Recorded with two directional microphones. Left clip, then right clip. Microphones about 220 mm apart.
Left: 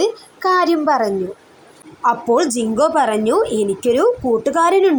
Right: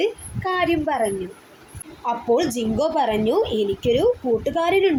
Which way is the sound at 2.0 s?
30° left (ahead or behind).